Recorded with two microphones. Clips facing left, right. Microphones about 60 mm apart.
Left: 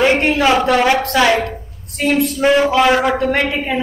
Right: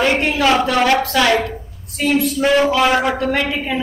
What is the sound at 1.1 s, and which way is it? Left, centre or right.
Speech, centre.